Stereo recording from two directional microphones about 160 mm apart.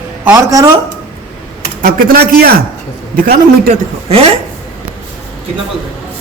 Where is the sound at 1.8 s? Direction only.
65° right (ahead or behind).